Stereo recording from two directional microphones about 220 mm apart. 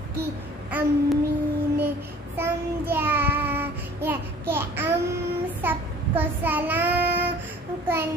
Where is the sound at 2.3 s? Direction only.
10° right (ahead or behind).